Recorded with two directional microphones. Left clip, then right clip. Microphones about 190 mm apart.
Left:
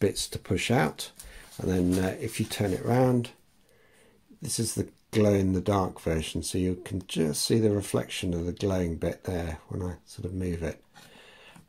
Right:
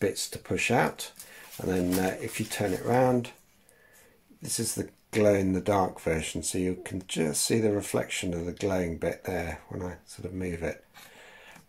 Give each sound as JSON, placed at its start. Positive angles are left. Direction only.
{"t": 0.0, "sound": "speech", "side_deg": 40}
{"t": 4.4, "sound": "speech", "side_deg": 30}